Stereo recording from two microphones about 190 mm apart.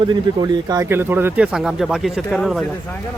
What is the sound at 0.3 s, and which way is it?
Speech, 25° right (ahead or behind).